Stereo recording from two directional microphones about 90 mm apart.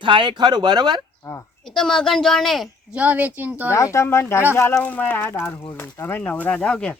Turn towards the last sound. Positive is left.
turn(degrees=10)  # may be behind; listen again after turning